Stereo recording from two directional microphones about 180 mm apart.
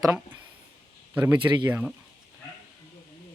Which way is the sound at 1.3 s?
20° right (ahead or behind).